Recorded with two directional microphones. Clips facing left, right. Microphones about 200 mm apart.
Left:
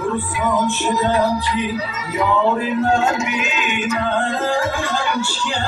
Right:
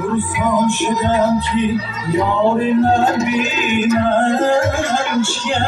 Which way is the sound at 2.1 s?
30° right (ahead or behind).